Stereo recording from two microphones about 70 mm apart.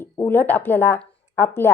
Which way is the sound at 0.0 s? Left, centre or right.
Left.